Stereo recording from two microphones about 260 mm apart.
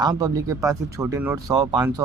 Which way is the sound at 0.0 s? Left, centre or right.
Centre.